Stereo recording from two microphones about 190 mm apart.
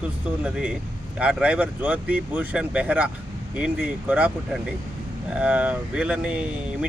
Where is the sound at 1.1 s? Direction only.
5° right (ahead or behind).